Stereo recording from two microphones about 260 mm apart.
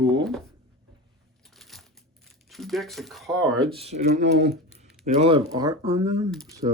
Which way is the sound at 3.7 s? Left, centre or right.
Right.